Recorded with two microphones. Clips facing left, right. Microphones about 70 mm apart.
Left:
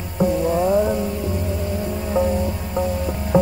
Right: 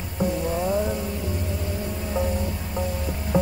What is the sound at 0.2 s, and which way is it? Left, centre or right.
Music, left.